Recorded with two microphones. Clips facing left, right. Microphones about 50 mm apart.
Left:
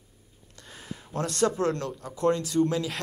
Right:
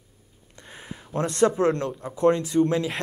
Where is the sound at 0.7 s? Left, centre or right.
Right.